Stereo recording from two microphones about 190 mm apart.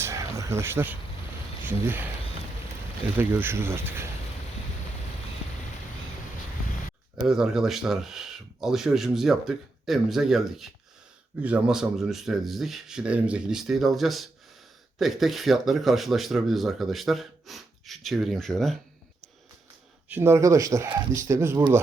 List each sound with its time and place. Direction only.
0.0 s a sound: 15° right (ahead or behind)
1.6 s speech: 10° right (ahead or behind)
3.2 s speech: 10° right (ahead or behind)
7.2 s speech: 5° right (ahead or behind)
20.1 s speech: 10° right (ahead or behind)